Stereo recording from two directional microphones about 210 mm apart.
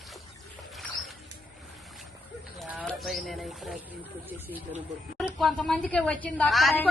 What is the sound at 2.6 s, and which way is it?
Bird, centre (ahead or behind).